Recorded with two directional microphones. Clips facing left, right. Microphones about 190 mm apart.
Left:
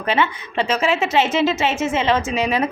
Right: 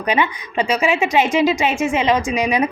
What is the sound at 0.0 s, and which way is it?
A woman's voice, 15° right (ahead or behind).